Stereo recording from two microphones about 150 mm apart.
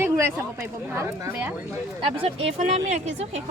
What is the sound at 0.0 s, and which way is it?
A woman's voice, 15° right (ahead or behind).